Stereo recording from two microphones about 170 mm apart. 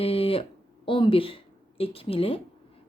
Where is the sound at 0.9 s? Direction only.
30° left (ahead or behind).